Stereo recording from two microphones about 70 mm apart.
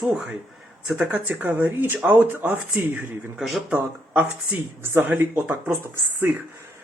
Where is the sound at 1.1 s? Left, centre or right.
Right.